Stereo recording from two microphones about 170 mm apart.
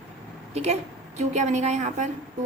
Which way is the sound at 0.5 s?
40° right (ahead or behind).